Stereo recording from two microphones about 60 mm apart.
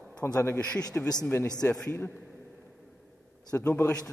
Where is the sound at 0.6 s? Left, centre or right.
Centre.